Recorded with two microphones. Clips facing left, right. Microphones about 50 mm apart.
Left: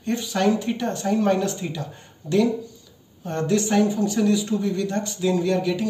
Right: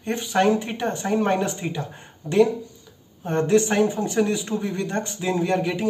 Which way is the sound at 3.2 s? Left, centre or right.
Right.